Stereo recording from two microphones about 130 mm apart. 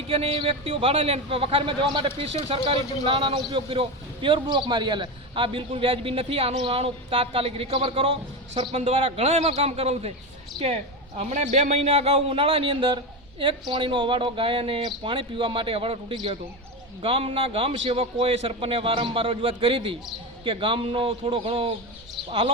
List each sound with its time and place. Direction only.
0.1 s a man's voice: 45° right (ahead or behind)
11.3 s a man's voice: 65° right (ahead or behind); by 22.5 s 45° right (ahead or behind)